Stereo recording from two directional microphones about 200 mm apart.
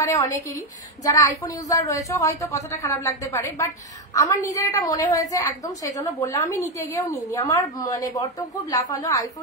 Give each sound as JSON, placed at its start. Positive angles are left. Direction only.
{"t": 0.0, "sound": "a woman's voice", "side_deg": 15}